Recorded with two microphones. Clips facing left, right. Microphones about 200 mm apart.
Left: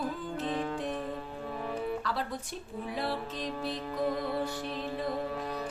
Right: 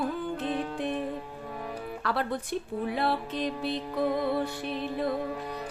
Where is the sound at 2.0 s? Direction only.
65° right (ahead or behind).